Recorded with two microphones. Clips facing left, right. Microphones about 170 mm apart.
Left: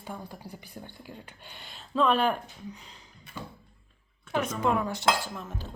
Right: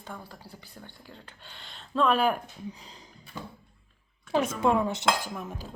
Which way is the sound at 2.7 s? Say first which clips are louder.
Right 2 dB; 35° right (ahead or behind).